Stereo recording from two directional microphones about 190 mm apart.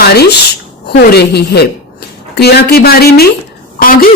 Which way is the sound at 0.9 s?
60° left (ahead or behind).